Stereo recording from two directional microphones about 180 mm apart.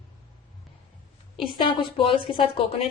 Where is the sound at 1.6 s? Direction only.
30° left (ahead or behind).